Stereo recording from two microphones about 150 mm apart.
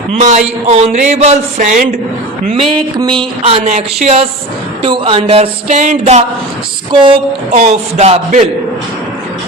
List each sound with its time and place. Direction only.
0.2 s speech: 50° right (ahead or behind)
3.0 s speech: 30° right (ahead or behind)
4.8 s speech: 35° right (ahead or behind); by 6.2 s 50° right (ahead or behind)
6.9 s a woman's voice: 30° right (ahead or behind)
7.5 s speech: 50° right (ahead or behind)